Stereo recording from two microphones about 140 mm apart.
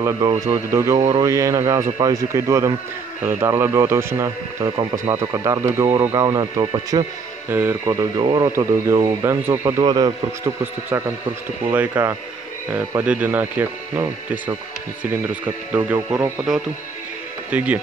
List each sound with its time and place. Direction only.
0.5 s speech: 20° right (ahead or behind)
0.9 s speech: 35° right (ahead or behind)
1.3 s speech: 20° right (ahead or behind)
7.4 s speech: 15° right (ahead or behind)
8.2 s speech: 35° right (ahead or behind)
8.5 s speech: 20° right (ahead or behind)
10.6 s speech: 15° right (ahead or behind)
17.5 s speech: 10° right (ahead or behind)